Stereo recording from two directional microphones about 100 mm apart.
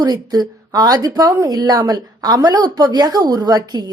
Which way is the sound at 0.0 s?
40° right (ahead or behind).